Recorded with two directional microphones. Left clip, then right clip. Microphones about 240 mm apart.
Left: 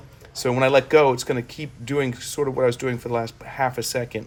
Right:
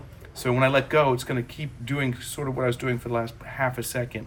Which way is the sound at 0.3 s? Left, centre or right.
Left.